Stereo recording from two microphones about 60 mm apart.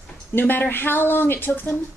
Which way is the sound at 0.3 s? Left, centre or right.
Left.